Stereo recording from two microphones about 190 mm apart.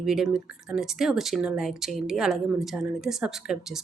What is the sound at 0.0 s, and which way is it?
Speech, 5° right (ahead or behind).